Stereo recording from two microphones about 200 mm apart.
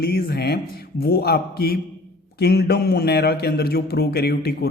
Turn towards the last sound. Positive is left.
turn(degrees=55)  # may be behind; listen again after turning